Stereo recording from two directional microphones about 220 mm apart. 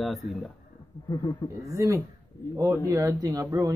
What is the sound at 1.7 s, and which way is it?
Speech, 15° right (ahead or behind).